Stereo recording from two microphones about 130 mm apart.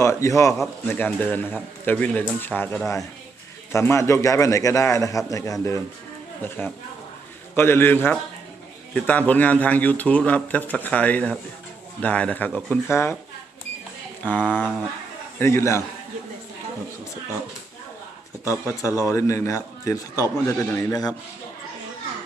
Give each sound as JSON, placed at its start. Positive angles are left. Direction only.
{"t": 0.0, "sound": "a man's voice", "side_deg": 20}
{"t": 12.9, "sound": "a man's voice", "side_deg": 20}
{"t": 14.3, "sound": "a man's voice", "side_deg": 15}
{"t": 18.4, "sound": "a man's voice", "side_deg": 20}